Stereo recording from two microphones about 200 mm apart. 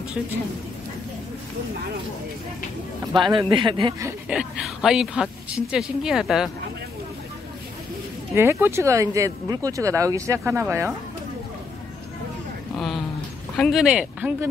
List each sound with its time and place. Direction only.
3.1 s speech: 20° right (ahead or behind)
4.3 s a woman's voice: 5° right (ahead or behind)
8.4 s speech: 10° right (ahead or behind)
12.7 s a sound: centre (ahead or behind)
13.6 s a woman's voice: centre (ahead or behind)